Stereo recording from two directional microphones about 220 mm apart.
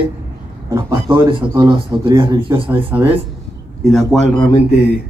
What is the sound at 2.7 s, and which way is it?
A man's voice, 10° right (ahead or behind).